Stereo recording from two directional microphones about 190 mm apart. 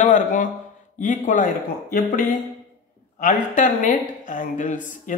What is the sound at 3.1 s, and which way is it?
Speech, 40° left (ahead or behind).